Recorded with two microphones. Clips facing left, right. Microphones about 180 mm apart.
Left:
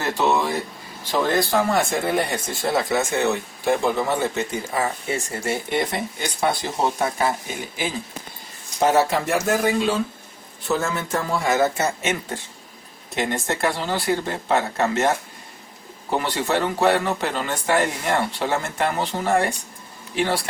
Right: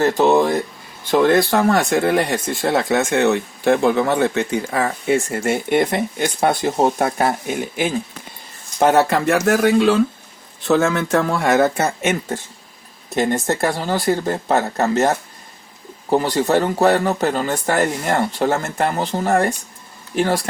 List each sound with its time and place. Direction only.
0.0 s speech: 45° right (ahead or behind)
1.5 s speech: 70° right (ahead or behind); by 7.3 s 50° right (ahead or behind)
8.8 s speech: 65° right (ahead or behind)
13.1 s speech: 40° right (ahead or behind)